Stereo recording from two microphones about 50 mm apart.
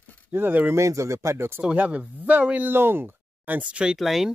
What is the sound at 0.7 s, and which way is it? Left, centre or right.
Speech, right.